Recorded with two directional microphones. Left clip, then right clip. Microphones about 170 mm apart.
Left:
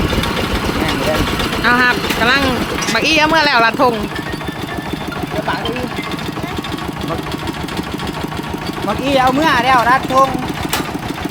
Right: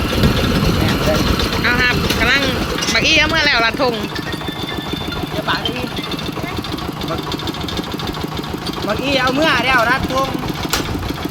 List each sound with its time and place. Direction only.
1.6 s vehicle: 40° left (ahead or behind)
2.9 s speech: 40° left (ahead or behind)
9.0 s speech: 90° left